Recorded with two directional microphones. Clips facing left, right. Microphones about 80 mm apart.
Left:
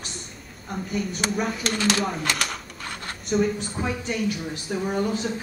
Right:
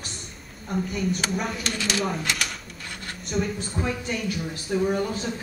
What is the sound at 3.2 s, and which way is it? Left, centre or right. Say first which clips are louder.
Speech: left 5 dB; centre.